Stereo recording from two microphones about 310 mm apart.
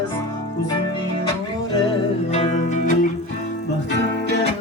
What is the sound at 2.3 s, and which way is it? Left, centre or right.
Music, left.